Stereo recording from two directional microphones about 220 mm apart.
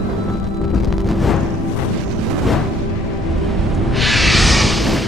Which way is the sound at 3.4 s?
Centre (ahead or behind).